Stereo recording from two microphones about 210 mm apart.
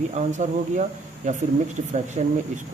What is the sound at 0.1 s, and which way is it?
Speech, 35° right (ahead or behind).